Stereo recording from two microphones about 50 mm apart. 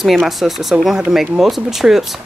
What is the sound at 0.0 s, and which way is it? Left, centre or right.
Speech, centre.